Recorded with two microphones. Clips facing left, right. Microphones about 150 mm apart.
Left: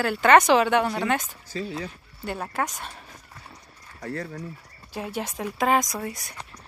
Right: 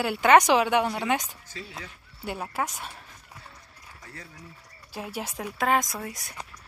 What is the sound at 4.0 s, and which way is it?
Speech, 65° left (ahead or behind).